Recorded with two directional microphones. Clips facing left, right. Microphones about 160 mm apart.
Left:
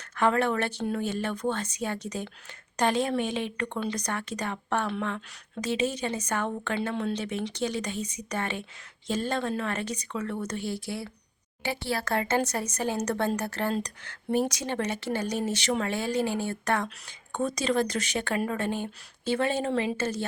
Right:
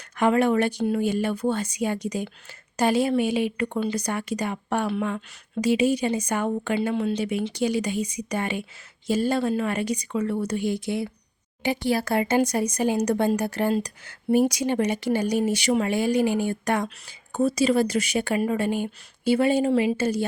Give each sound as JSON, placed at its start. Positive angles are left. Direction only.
{"t": 0.2, "sound": "a woman's voice", "side_deg": -15}